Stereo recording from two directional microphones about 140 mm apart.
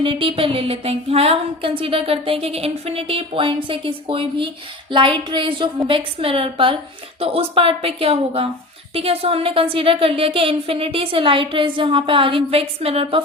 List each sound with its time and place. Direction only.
0.0 s speech: 40° right (ahead or behind)